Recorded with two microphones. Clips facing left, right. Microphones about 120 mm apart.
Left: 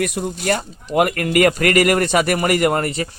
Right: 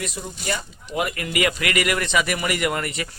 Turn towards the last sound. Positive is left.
turn(degrees=40)  # may be behind; listen again after turning